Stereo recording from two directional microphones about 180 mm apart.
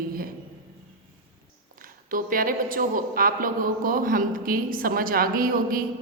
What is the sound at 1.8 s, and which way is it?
A woman's voice, 50° right (ahead or behind).